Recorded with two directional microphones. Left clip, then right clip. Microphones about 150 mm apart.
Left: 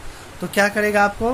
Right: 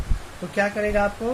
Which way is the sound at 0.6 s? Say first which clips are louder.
Left 5 dB; 80° left.